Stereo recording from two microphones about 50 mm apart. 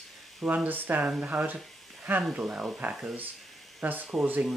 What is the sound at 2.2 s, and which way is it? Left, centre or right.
Speech, centre.